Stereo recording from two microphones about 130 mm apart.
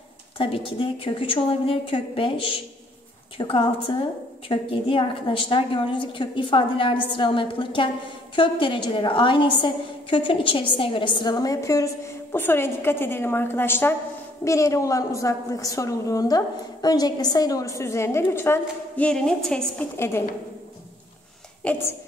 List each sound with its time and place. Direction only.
0.4 s a woman's voice: 45° left (ahead or behind); by 19.9 s 5° left (ahead or behind)
20.0 s a woman's voice: 20° left (ahead or behind)
21.6 s a woman's voice: 10° left (ahead or behind)